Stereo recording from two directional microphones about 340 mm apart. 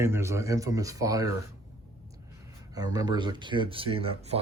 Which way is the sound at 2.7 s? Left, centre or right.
Centre.